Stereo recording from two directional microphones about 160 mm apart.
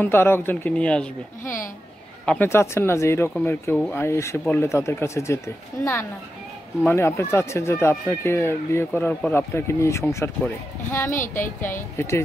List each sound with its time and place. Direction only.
0.0 s speech: 15° left (ahead or behind)
6.9 s speech: 15° left (ahead or behind)
11.1 s speech: 55° left (ahead or behind)
11.6 s speech: 15° left (ahead or behind)